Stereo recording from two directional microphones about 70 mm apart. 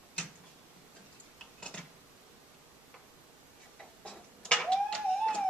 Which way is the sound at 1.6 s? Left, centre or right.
Centre.